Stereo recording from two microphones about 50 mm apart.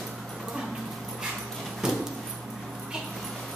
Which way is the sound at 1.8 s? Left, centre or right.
Centre.